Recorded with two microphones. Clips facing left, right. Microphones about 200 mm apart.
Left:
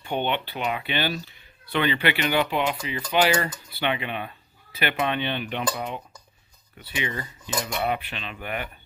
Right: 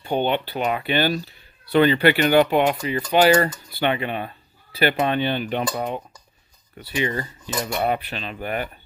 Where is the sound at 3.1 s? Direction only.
40° right (ahead or behind).